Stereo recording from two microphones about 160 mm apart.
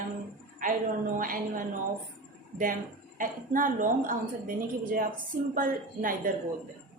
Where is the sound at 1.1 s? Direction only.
60° right (ahead or behind).